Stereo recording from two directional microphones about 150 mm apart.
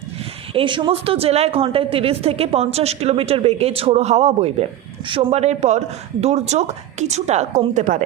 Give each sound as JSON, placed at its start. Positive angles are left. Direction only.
{"t": 0.5, "sound": "a woman's voice", "side_deg": -35}